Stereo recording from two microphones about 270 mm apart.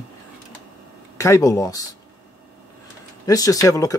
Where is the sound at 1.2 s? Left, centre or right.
Centre.